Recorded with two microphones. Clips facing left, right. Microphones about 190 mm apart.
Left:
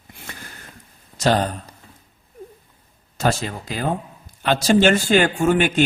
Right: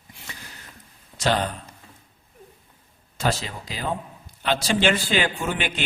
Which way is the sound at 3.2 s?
50° left (ahead or behind).